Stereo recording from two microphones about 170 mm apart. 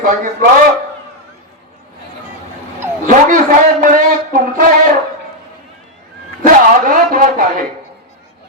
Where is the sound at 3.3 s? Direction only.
50° right (ahead or behind).